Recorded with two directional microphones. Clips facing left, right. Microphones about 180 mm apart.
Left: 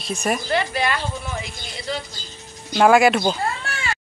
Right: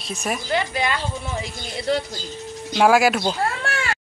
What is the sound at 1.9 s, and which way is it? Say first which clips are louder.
Speech: right 6 dB; 60° right (ahead or behind).